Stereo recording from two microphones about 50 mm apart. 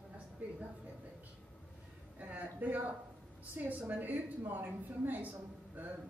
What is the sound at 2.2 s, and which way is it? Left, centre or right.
A woman's voice, right.